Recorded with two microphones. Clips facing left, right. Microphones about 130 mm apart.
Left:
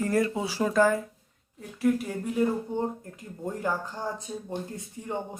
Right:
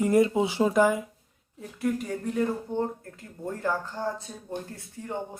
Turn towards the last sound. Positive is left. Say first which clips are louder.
# left 2 dB
turn(degrees=20)  # may be behind; listen again after turning